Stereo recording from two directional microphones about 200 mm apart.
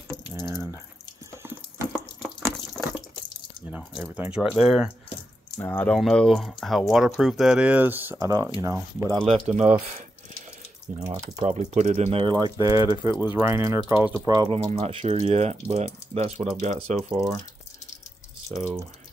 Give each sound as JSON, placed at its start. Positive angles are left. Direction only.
{"t": 0.3, "sound": "speech", "side_deg": -10}
{"t": 2.5, "sound": "water", "side_deg": 0}
{"t": 4.0, "sound": "speech", "side_deg": -10}
{"t": 9.2, "sound": "speech", "side_deg": -30}
{"t": 12.9, "sound": "speech", "side_deg": 20}
{"t": 13.3, "sound": "speech", "side_deg": -10}
{"t": 14.6, "sound": "speech", "side_deg": -30}